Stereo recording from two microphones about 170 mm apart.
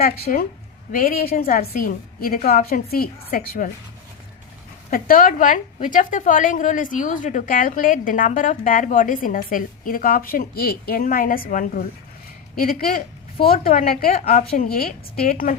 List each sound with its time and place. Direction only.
0.0 s a woman's voice: 55° left (ahead or behind)
4.9 s a woman's voice: 55° left (ahead or behind)
14.2 s a woman's voice: 40° left (ahead or behind)
14.5 s a woman's voice: 60° left (ahead or behind)